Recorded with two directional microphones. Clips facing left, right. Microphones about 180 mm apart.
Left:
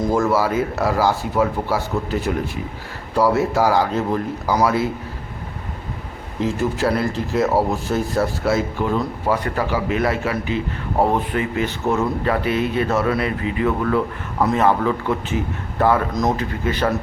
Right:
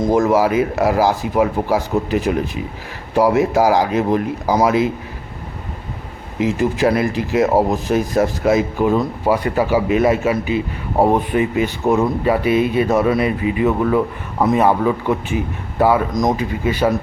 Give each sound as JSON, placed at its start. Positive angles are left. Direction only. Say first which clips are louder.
{"t": 0.1, "sound": "speech", "louder": "right 5 dB", "side_deg": -15}
{"t": 6.4, "sound": "speech", "louder": "right 4 dB", "side_deg": -15}